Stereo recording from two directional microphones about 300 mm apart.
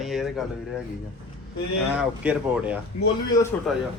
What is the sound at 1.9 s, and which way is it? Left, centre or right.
A man's voice, centre.